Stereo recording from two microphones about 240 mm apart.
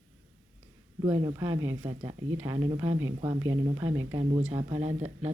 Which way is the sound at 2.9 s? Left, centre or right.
Right.